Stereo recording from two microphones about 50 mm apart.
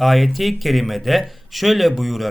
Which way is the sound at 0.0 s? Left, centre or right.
Centre.